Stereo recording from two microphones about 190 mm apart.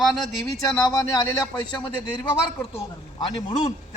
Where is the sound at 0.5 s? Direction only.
20° left (ahead or behind).